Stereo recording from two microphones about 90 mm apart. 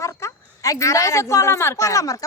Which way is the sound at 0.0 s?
35° left (ahead or behind).